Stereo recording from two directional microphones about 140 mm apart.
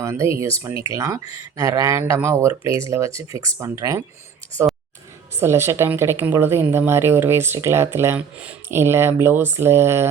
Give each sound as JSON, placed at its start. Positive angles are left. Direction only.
{"t": 0.0, "sound": "speech", "side_deg": -20}
{"t": 5.3, "sound": "speech", "side_deg": -20}